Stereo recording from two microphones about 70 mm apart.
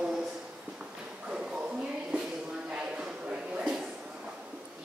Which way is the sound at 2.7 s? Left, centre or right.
Centre.